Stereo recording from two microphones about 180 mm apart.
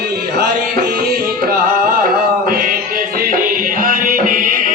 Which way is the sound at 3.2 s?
50° right (ahead or behind).